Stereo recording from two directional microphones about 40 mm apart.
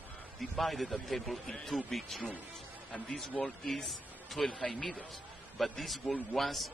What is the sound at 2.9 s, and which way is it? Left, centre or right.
Speech, left.